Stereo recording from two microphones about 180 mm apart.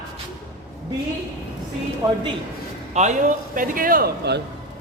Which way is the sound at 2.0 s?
20° right (ahead or behind).